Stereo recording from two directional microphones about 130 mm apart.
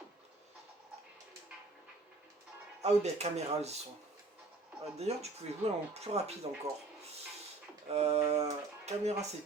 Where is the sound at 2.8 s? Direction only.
60° right (ahead or behind).